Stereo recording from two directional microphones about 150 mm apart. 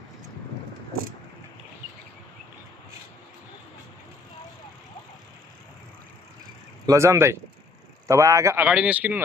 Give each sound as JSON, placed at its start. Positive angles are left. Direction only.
{"t": 6.9, "sound": "speech", "side_deg": -20}
{"t": 8.6, "sound": "a man's voice", "side_deg": -5}